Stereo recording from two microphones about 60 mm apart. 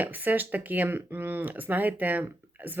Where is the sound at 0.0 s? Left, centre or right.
Right.